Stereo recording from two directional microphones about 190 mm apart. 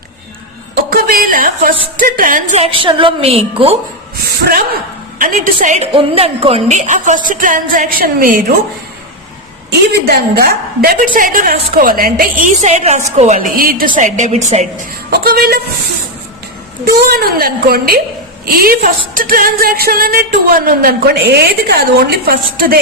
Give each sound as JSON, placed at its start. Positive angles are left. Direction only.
{"t": 0.9, "sound": "a woman's voice", "side_deg": -50}
{"t": 2.6, "sound": "a woman's voice", "side_deg": -30}
{"t": 5.2, "sound": "a woman's voice", "side_deg": -45}
{"t": 9.6, "sound": "a woman's voice", "side_deg": -55}
{"t": 15.1, "sound": "a woman's voice", "side_deg": -55}
{"t": 16.8, "sound": "a woman's voice", "side_deg": -50}